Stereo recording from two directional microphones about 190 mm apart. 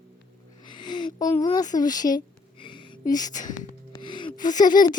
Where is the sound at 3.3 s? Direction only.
40° left (ahead or behind).